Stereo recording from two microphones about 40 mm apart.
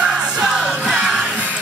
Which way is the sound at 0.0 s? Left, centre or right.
Centre.